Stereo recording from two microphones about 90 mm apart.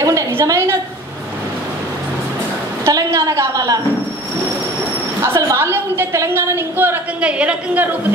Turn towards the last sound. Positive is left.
turn(degrees=-15)  # may be behind; listen again after turning